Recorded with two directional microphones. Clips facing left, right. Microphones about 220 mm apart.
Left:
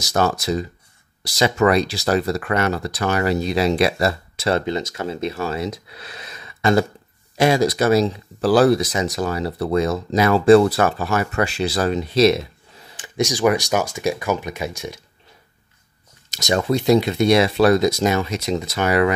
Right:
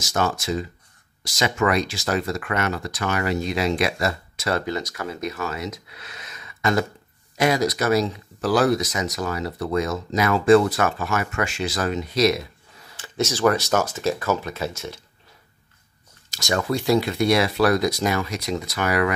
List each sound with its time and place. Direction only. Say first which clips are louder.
0.0 s speech: left 4 dB; 35° left (ahead or behind)
12.9 s speech: left 3 dB; 15° left (ahead or behind)
16.3 s speech: left 4 dB; 20° left (ahead or behind)